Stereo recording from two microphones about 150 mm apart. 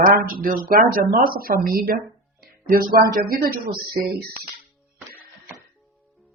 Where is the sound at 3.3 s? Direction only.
85° right.